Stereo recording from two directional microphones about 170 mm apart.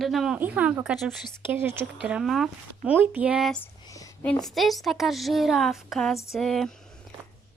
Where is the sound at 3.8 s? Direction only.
20° left (ahead or behind).